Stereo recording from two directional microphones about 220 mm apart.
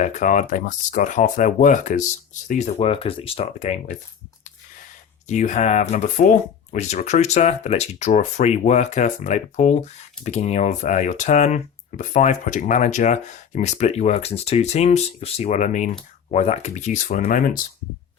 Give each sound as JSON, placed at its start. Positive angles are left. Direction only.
{"t": 0.0, "sound": "speech", "side_deg": 35}
{"t": 5.3, "sound": "speech", "side_deg": 30}